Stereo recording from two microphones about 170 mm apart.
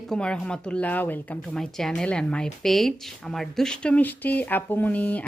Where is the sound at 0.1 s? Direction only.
5° left (ahead or behind).